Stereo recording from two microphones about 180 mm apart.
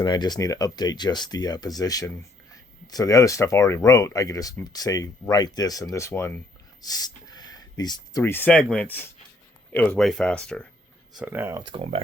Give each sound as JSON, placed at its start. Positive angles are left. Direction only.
{"t": 0.0, "sound": "speech", "side_deg": 25}
{"t": 6.8, "sound": "a sound", "side_deg": 20}
{"t": 8.2, "sound": "speech", "side_deg": 10}
{"t": 10.0, "sound": "speech", "side_deg": 5}
{"t": 11.1, "sound": "speech", "side_deg": -10}
{"t": 11.6, "sound": "speech", "side_deg": -30}